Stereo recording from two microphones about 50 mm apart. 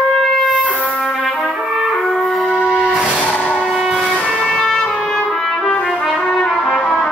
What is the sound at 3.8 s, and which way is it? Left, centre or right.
Vehicle, centre.